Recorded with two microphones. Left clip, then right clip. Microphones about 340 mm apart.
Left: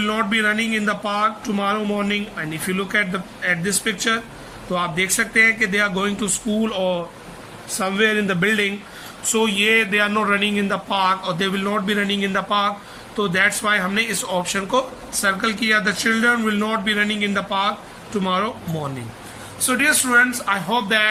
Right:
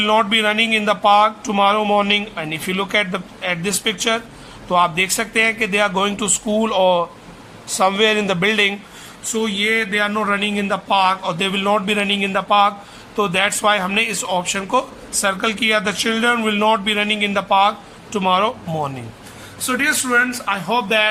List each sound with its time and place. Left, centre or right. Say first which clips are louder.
0.0 s a man's voice: right 4 dB; centre
6.7 s speech: right 9 dB; right
7.9 s a man's voice: right 2 dB; centre
9.3 s speech: left 1 dB; centre
19.6 s speech: even; centre